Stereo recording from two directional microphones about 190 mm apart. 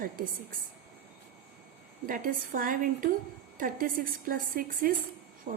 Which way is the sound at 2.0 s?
45° right (ahead or behind).